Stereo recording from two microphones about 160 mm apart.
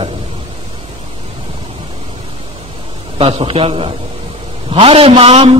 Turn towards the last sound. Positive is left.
turn(degrees=-40)  # may be behind; listen again after turning